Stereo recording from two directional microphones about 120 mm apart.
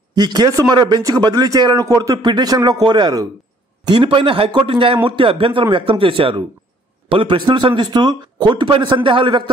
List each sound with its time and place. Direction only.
0.1 s a man's voice: 35° right (ahead or behind)